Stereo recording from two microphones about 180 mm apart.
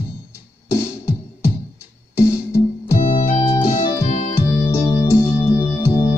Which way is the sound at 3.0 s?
35° left (ahead or behind).